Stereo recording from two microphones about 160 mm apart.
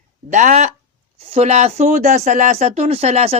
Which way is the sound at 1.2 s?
40° right (ahead or behind).